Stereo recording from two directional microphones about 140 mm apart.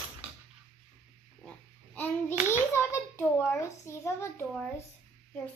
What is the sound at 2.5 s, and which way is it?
A child's voice, 20° left (ahead or behind).